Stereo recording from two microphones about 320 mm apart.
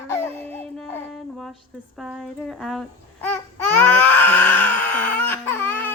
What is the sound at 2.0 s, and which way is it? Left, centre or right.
Babbling, centre.